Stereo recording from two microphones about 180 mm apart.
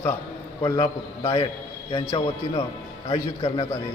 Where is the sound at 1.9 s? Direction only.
20° left (ahead or behind).